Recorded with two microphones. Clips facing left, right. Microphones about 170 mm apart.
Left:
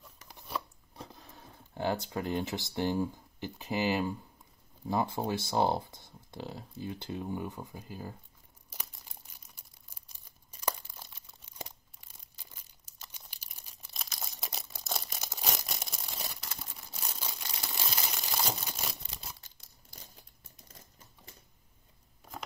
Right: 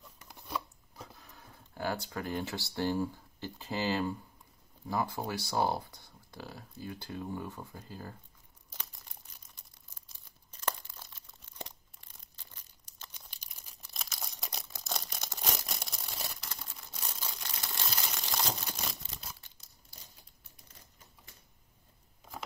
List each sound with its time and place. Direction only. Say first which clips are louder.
0.9 s speech: left 3 dB; 30° left (ahead or behind); by 4.2 s 15° left (ahead or behind)
4.8 s speech: left 3 dB; 25° left (ahead or behind)
8.6 s crumpling: left 1 dB; 10° left (ahead or behind)